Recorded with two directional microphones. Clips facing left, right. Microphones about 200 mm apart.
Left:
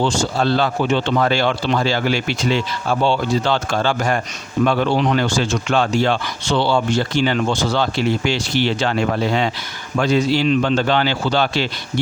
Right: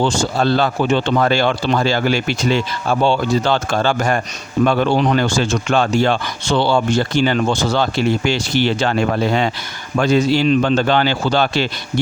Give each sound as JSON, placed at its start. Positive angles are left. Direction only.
{"t": 0.0, "sound": "speech", "side_deg": -45}